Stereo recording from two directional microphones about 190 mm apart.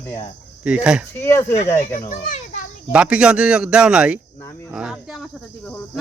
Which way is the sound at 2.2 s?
40° left (ahead or behind).